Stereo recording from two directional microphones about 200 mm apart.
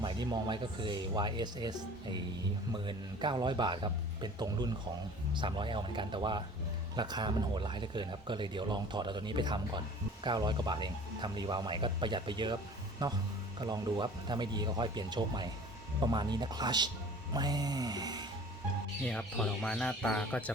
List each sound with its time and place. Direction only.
0.0 s speech: 20° right (ahead or behind)
19.0 s speech: 5° left (ahead or behind)